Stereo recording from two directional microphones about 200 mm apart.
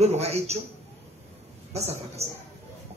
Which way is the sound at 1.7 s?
30° right (ahead or behind).